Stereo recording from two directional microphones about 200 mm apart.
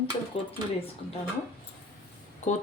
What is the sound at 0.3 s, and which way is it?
Speech, 30° left (ahead or behind).